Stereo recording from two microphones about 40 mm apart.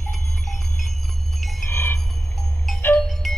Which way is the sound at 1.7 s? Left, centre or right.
Left.